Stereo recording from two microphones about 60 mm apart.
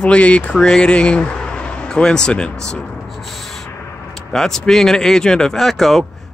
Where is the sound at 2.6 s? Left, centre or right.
Centre.